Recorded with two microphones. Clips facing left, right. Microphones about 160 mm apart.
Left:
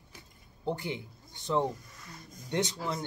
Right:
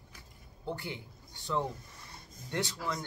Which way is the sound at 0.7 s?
20° left (ahead or behind).